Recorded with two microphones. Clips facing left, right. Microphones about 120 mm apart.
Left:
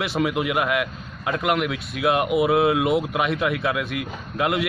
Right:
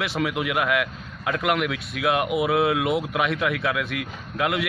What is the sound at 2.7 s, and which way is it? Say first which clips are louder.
Speech: left 2 dB; centre (ahead or behind).